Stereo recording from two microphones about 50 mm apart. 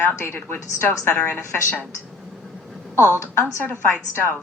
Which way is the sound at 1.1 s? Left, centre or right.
Left.